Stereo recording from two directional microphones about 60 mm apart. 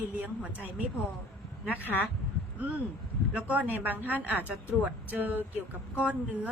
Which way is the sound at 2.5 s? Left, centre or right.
Right.